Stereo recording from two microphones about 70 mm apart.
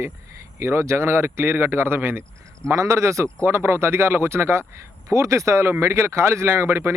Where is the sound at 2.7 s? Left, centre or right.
Right.